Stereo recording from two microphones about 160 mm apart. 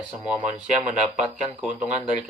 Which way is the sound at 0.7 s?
45° right (ahead or behind).